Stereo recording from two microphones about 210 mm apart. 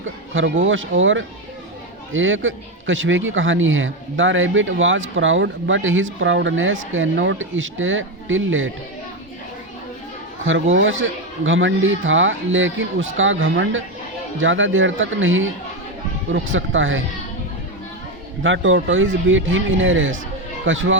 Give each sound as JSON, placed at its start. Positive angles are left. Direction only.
{"t": 0.0, "sound": "a man's voice", "side_deg": -65}
{"t": 10.4, "sound": "a man's voice", "side_deg": -65}
{"t": 18.4, "sound": "a man's voice", "side_deg": -65}